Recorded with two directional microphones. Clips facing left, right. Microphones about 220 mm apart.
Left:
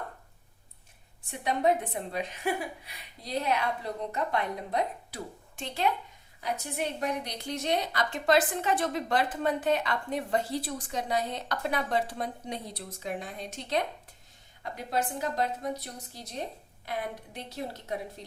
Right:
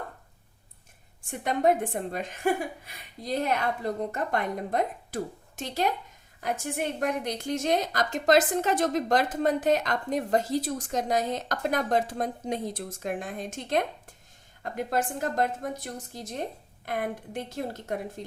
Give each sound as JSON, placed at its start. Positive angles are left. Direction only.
{"t": 1.3, "sound": "a woman's voice", "side_deg": -50}